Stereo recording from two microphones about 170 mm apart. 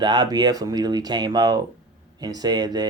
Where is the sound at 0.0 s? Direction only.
25° right (ahead or behind).